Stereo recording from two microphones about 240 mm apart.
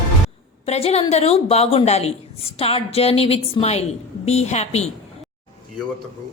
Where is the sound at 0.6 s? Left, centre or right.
Left.